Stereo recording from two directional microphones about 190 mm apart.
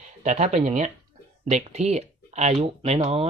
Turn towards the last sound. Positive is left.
turn(degrees=-35)  # may be behind; listen again after turning